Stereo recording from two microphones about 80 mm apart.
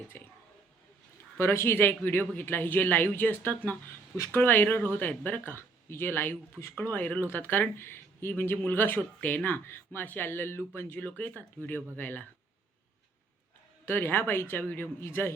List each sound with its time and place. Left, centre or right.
0.1 s whispering: left
1.4 s a man's voice: left
6.7 s a man's voice: centre
13.8 s a man's voice: left